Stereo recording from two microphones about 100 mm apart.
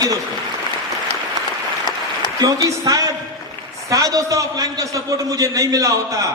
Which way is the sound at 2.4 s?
35° right (ahead or behind).